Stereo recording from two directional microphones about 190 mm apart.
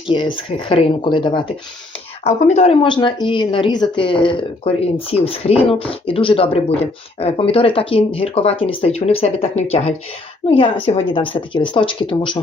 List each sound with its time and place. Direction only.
0.1 s speech: 25° left (ahead or behind)